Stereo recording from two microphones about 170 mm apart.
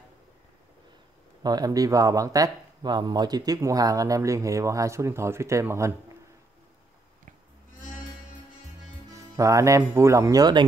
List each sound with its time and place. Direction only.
1.4 s speech: 20° right (ahead or behind)
9.1 s speech: 20° right (ahead or behind)